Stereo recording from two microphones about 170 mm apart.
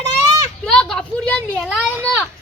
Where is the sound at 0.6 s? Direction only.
5° left (ahead or behind).